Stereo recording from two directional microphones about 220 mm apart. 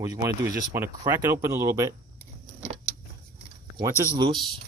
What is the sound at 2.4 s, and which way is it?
Keys jangling, 30° right (ahead or behind).